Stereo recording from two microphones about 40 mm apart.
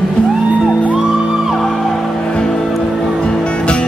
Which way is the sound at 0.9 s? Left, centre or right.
Centre.